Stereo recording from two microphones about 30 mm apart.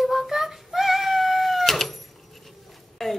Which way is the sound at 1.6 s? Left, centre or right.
Centre.